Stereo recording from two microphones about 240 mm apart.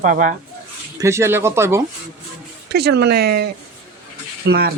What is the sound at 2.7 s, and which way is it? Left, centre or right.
Speech, right.